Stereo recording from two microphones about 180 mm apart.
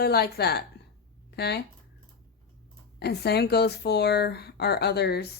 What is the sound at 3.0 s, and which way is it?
Speech, 65° left (ahead or behind).